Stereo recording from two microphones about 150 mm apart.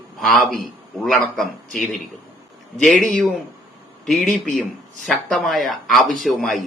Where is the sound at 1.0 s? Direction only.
Centre (ahead or behind).